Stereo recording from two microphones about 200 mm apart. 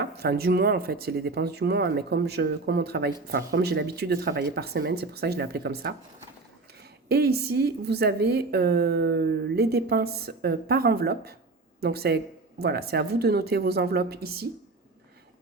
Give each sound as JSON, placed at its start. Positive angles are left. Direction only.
{"t": 0.0, "sound": "a woman's voice", "side_deg": -50}
{"t": 7.1, "sound": "a woman's voice", "side_deg": -50}